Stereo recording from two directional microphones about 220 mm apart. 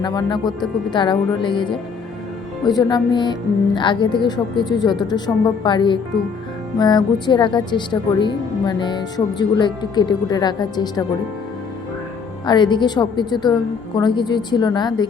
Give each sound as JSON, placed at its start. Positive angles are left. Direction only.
{"t": 0.0, "sound": "speech", "side_deg": 20}
{"t": 2.6, "sound": "speech", "side_deg": 20}
{"t": 12.5, "sound": "speech", "side_deg": 20}